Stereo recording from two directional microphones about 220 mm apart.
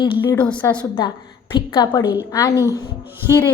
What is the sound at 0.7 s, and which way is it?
A woman's voice, 20° left (ahead or behind).